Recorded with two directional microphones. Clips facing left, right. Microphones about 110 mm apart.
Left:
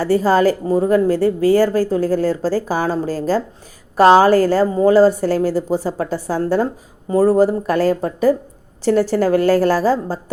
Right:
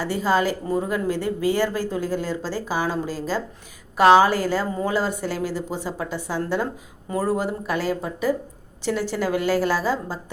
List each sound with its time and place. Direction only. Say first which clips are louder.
0.0 s a woman's voice: left 7 dB; 40° left (ahead or behind)